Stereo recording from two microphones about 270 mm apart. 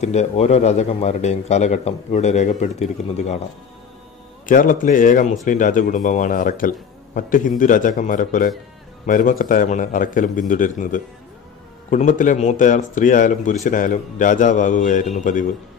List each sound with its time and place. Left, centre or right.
0.0 s speech: left
4.5 s speech: left